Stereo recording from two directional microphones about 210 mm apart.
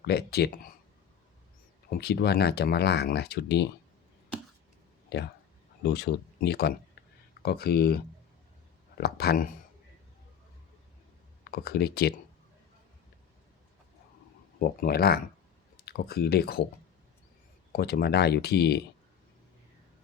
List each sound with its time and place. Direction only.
0.0 s speech: 50° left (ahead or behind)
1.9 s speech: 50° left (ahead or behind)
5.0 s speech: 55° left (ahead or behind)
11.4 s speech: 50° left (ahead or behind)
14.6 s speech: 45° left (ahead or behind)
17.7 s speech: 50° left (ahead or behind)